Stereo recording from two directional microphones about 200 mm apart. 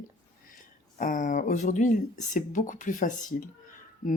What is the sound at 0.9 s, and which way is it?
Speech, 40° left (ahead or behind).